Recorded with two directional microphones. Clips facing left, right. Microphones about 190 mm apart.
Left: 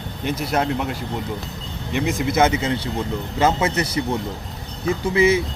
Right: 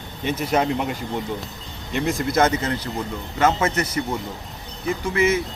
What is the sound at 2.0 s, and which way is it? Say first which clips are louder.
A man's voice: left 1 dB; 5° left (ahead or behind).